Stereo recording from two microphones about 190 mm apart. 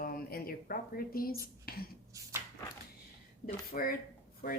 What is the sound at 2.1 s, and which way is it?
Speech, 15° right (ahead or behind).